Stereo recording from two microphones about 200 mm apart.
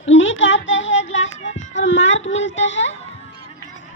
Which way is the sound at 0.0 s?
75° left (ahead or behind).